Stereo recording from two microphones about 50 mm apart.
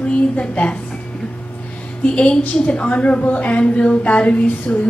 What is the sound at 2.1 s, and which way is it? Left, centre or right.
A woman's voice, left.